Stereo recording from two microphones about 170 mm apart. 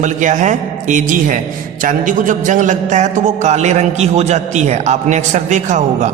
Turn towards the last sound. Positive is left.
turn(degrees=-45)  # may be behind; listen again after turning